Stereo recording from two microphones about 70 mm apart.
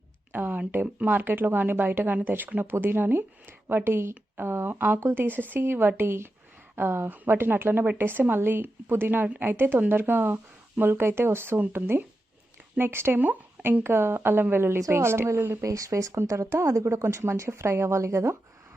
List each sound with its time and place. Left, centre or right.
0.3 s a sound: right
0.7 s speech: right
15.6 s speech: right